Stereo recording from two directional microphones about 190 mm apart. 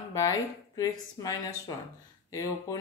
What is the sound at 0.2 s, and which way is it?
A woman's voice, 20° left (ahead or behind).